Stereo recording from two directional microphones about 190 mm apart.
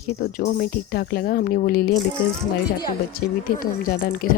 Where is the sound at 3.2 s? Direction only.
50° left (ahead or behind).